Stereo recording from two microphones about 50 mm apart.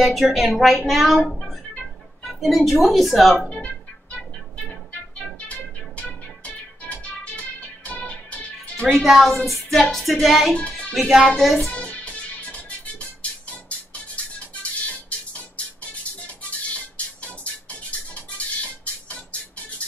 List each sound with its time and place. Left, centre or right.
0.0 s a woman's voice: centre
3.4 s music: left
5.5 s music: left
8.9 s a woman's voice: centre
11.7 s music: left
18.6 s music: left